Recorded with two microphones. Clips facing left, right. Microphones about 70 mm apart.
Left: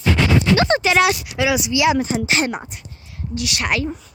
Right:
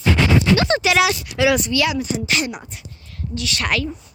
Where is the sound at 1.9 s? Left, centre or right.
Left.